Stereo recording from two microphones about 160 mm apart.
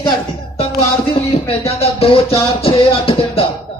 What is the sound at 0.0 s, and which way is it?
Music, 35° left (ahead or behind).